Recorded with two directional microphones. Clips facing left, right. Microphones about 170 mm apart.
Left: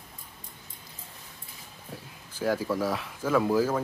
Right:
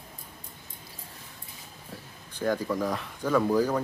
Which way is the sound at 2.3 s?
5° left (ahead or behind).